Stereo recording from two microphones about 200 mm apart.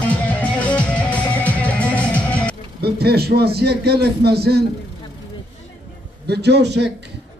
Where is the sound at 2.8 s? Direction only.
55° right (ahead or behind).